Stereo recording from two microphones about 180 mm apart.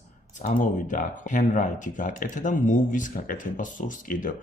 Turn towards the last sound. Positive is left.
turn(degrees=50)  # may be behind; listen again after turning